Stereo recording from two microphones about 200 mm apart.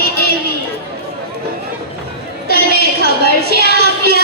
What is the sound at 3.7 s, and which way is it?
Music, 50° right (ahead or behind).